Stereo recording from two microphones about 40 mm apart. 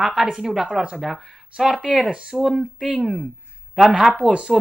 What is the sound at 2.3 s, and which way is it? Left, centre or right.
Speech, centre.